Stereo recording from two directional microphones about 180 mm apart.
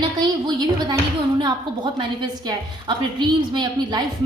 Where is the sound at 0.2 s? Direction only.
25° right (ahead or behind).